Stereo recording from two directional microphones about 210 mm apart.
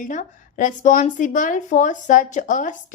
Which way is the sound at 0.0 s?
40° left (ahead or behind).